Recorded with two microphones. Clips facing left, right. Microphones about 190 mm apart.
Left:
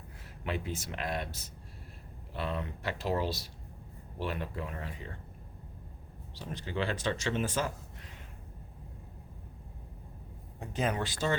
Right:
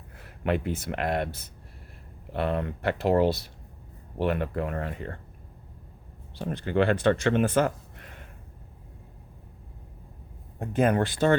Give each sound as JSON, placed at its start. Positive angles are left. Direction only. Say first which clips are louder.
{"t": 0.4, "sound": "speech", "louder": "right 9 dB", "side_deg": -60}
{"t": 6.3, "sound": "speech", "louder": "right 10 dB", "side_deg": -60}
{"t": 10.6, "sound": "speech", "louder": "right 9 dB", "side_deg": -55}